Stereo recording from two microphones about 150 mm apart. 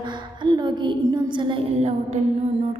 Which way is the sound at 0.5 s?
30° right (ahead or behind).